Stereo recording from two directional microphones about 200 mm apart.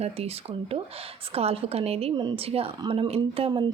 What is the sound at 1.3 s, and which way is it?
A woman's voice, 30° right (ahead or behind).